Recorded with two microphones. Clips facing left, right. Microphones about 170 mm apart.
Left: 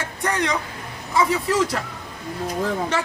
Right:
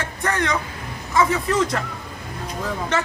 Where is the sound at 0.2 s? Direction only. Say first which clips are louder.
Even; 15° left (ahead or behind).